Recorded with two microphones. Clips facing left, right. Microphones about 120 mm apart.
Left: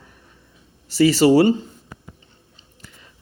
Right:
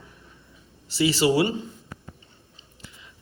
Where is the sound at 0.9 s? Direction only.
45° left (ahead or behind).